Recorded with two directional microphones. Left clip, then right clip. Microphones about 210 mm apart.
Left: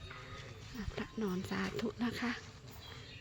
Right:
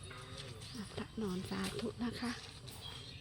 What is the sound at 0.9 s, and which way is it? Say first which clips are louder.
Speech: left 3 dB; 15° left (ahead or behind).